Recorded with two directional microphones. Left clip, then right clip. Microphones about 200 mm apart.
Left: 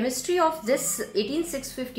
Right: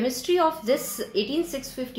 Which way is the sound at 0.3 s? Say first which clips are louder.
Right 1 dB; 15° right (ahead or behind).